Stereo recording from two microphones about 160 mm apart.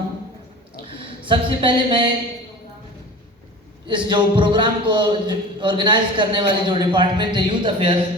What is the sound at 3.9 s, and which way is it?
A man's voice, 30° right (ahead or behind).